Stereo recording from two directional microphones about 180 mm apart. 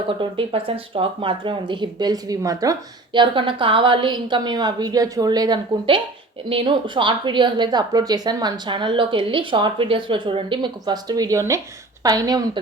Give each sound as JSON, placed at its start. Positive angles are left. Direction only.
{"t": 0.2, "sound": "speech", "side_deg": -30}